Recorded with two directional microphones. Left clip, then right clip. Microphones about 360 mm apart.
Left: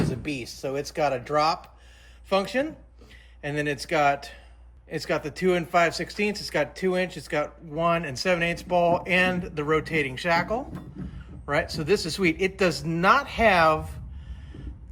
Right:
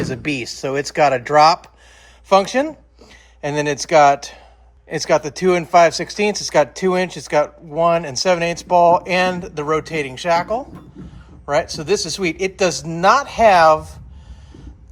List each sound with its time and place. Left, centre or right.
0.1 s speech: right